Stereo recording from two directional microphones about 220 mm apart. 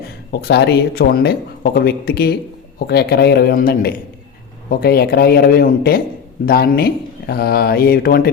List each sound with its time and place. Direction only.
0.3 s speech: 50° left (ahead or behind)